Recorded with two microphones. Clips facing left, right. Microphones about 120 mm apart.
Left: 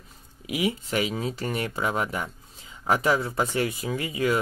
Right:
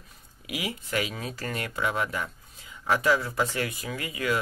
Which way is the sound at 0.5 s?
25° left (ahead or behind).